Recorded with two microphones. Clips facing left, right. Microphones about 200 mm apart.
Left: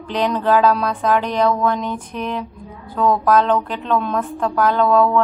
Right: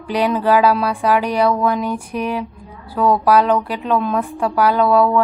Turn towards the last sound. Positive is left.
turn(degrees=-10)  # may be behind; listen again after turning